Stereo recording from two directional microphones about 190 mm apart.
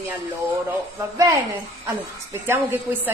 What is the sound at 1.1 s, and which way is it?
A woman's voice, 15° right (ahead or behind).